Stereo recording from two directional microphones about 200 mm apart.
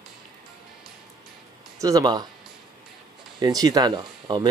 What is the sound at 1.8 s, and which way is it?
Speech, 20° right (ahead or behind).